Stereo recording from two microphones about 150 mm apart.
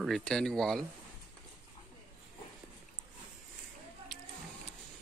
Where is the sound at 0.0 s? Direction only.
Centre (ahead or behind).